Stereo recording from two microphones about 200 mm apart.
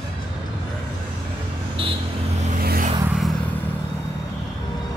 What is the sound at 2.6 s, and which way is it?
Vehicle, 45° right (ahead or behind).